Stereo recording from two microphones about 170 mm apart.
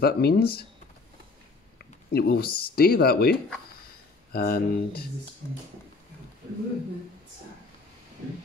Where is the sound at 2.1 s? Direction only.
65° left (ahead or behind).